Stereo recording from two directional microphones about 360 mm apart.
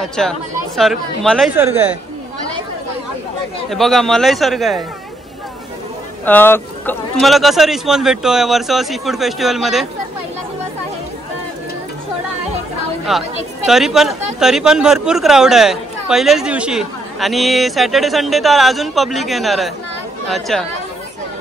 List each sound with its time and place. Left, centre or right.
0.0 s a man's voice: centre
3.7 s a man's voice: centre
6.2 s a man's voice: centre
13.1 s a man's voice: centre